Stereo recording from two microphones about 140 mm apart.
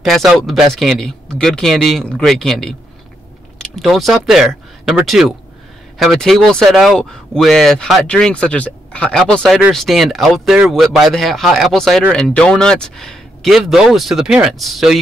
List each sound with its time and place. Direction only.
0.0 s speech: centre (ahead or behind)